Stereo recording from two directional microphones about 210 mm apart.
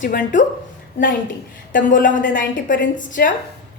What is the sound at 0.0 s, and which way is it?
Speech, 40° left (ahead or behind).